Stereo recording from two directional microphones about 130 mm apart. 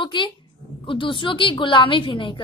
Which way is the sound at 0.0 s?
40° left (ahead or behind).